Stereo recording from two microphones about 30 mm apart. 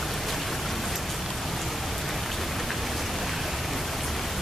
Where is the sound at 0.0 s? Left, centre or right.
Centre.